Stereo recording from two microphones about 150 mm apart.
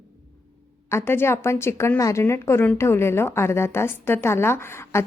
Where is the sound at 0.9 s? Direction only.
15° left (ahead or behind).